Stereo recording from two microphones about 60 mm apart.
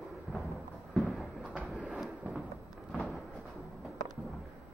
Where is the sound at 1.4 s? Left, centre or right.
Centre.